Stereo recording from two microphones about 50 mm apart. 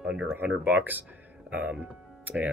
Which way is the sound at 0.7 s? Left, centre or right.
Right.